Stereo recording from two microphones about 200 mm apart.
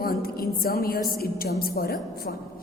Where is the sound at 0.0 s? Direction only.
45° left (ahead or behind).